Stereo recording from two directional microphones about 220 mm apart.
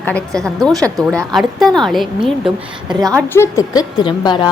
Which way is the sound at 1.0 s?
5° left (ahead or behind).